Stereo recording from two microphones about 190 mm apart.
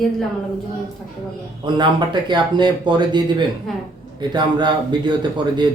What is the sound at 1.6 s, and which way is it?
Speech, 25° right (ahead or behind).